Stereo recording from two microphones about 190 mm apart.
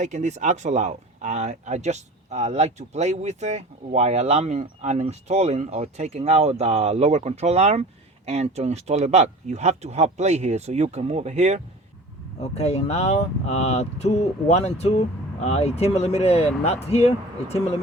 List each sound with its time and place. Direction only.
0.0 s speech: 40° right (ahead or behind)
12.4 s speech: 35° left (ahead or behind)